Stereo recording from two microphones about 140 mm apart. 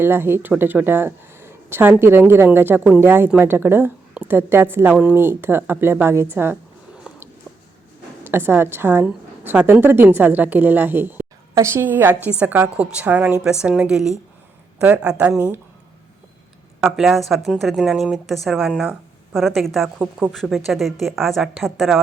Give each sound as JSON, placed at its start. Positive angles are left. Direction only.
{"t": 0.0, "sound": "speech", "side_deg": -15}
{"t": 16.8, "sound": "a woman's voice", "side_deg": 0}
{"t": 20.0, "sound": "speech", "side_deg": -10}
{"t": 20.3, "sound": "a woman's voice", "side_deg": 0}